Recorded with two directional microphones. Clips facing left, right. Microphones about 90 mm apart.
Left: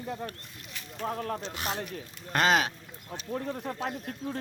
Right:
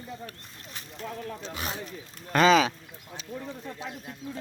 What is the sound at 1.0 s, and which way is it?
Speech, 50° left (ahead or behind).